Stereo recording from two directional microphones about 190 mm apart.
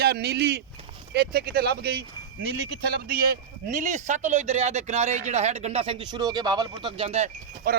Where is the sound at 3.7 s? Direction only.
40° right (ahead or behind).